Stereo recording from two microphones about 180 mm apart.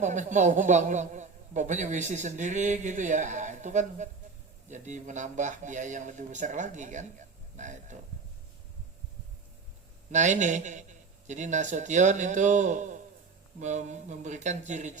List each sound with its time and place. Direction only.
0.0 s a man's voice: 40° right (ahead or behind)
10.1 s a man's voice: 40° right (ahead or behind)